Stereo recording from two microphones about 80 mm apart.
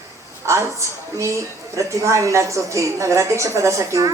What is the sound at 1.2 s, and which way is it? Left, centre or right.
A woman's voice, right.